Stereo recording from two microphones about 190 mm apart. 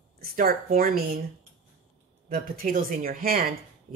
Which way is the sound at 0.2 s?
50° right (ahead or behind).